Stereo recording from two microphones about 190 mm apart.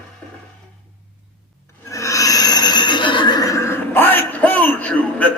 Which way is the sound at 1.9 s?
15° left (ahead or behind).